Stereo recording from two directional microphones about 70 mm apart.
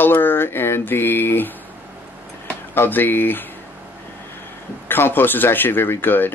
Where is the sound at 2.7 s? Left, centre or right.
Left.